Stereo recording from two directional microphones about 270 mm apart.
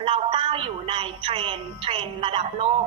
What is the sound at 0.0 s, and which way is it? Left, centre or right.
A woman's voice, centre.